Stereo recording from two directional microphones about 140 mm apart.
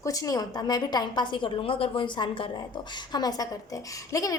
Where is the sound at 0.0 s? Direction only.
25° left (ahead or behind).